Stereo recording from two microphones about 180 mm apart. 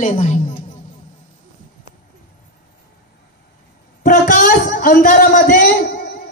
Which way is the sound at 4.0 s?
50° left (ahead or behind).